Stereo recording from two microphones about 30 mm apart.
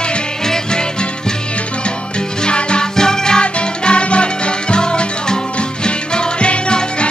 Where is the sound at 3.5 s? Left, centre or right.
Left.